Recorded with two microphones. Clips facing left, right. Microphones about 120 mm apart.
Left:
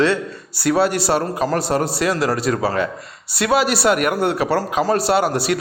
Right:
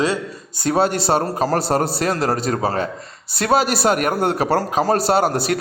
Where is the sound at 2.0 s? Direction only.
45° right (ahead or behind).